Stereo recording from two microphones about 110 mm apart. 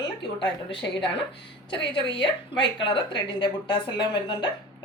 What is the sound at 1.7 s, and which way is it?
A woman's voice, 50° left (ahead or behind).